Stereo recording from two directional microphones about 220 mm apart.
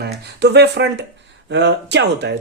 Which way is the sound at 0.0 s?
50° right (ahead or behind).